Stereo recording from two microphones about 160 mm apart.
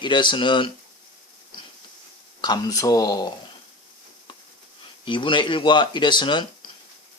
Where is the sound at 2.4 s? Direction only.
25° left (ahead or behind).